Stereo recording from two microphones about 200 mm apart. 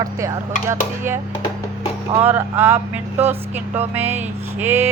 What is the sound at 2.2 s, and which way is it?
Speech, 10° right (ahead or behind).